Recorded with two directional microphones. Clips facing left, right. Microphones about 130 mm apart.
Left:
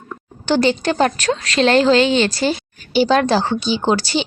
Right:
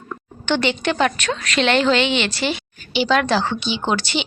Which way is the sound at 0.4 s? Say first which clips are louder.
Left 4 dB; 35° left (ahead or behind).